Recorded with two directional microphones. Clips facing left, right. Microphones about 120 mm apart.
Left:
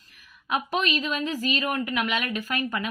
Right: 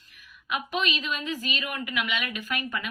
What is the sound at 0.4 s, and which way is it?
A woman's voice, 35° left (ahead or behind).